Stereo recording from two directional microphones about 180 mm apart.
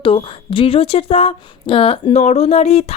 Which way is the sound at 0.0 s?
30° left (ahead or behind).